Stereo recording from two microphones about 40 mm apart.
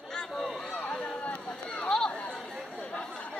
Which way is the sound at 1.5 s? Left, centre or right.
Centre.